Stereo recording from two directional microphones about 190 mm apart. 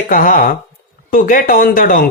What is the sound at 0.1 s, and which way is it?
Speech, 45° left (ahead or behind).